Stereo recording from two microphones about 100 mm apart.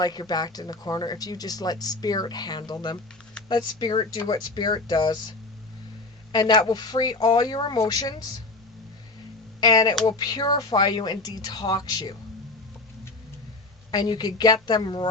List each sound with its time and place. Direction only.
0.0 s speech: 45° left (ahead or behind)
6.3 s speech: 45° left (ahead or behind)
9.6 s speech: 40° left (ahead or behind)
13.9 s speech: 45° left (ahead or behind)